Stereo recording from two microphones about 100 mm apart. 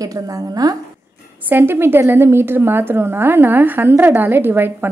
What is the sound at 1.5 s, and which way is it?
A woman's voice, 20° right (ahead or behind).